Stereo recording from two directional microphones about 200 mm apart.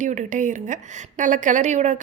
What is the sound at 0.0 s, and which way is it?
A woman's voice, 40° right (ahead or behind).